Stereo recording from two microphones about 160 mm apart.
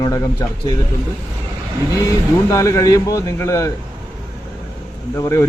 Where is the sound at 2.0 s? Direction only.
20° left (ahead or behind).